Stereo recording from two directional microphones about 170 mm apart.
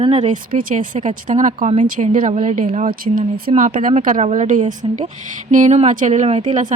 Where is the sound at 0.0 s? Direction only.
40° right (ahead or behind).